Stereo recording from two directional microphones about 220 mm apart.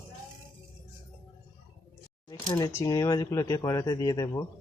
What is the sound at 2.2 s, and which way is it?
Speech, 15° left (ahead or behind).